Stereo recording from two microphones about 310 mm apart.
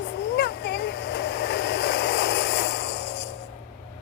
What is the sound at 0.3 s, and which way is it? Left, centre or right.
Vehicle, left.